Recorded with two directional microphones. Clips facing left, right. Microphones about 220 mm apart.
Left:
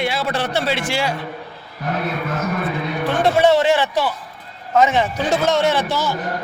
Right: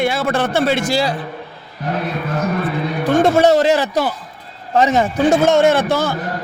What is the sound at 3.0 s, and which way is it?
A man's voice, 45° right (ahead or behind).